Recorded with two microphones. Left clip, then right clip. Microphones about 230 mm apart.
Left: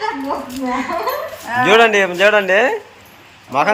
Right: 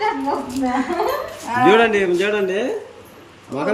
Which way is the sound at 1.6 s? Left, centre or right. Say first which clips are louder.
Left 3 dB; centre.